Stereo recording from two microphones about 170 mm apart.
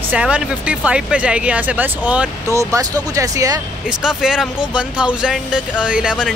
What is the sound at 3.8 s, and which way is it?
Speech, 5° right (ahead or behind).